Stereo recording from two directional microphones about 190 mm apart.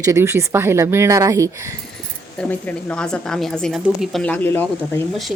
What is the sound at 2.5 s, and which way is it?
Speech, 10° left (ahead or behind).